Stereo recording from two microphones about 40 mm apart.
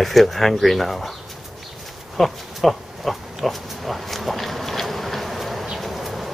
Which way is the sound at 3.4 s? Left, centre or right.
Centre.